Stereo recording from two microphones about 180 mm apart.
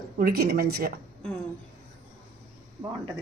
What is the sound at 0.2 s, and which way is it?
Speech, 55° right (ahead or behind).